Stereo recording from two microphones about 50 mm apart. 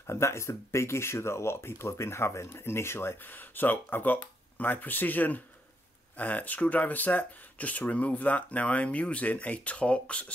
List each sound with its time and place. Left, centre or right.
0.0 s speech: left
3.3 s speech: left